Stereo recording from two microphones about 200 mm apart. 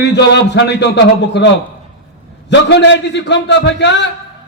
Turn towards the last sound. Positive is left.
turn(degrees=60)  # may be behind; listen again after turning